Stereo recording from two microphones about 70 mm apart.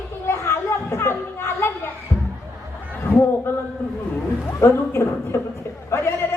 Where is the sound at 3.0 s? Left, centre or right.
Left.